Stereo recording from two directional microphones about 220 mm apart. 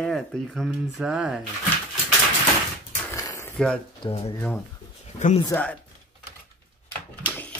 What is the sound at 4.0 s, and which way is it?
Speech, 25° left (ahead or behind).